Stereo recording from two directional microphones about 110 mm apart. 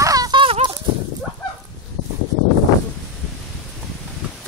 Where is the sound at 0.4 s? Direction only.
50° right (ahead or behind).